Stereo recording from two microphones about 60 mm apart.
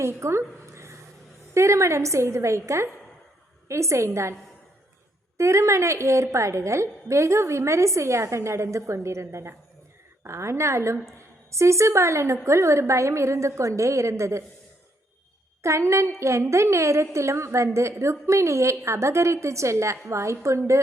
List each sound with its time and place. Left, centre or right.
0.0 s a woman's voice: right
5.4 s a woman's voice: right
15.6 s a woman's voice: right